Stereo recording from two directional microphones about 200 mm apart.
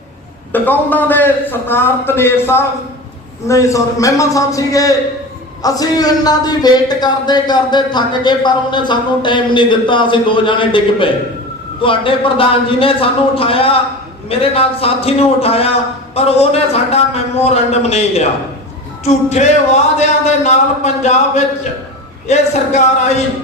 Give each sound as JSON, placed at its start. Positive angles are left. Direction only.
{"t": 0.5, "sound": "a man's voice", "side_deg": 10}